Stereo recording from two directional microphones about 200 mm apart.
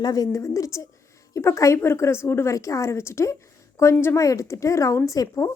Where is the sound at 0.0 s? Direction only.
20° left (ahead or behind).